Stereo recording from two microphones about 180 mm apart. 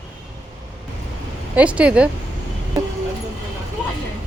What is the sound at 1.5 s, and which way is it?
Speech, 5° right (ahead or behind).